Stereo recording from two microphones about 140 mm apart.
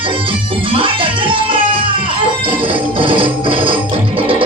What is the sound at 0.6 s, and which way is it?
Music, 40° right (ahead or behind).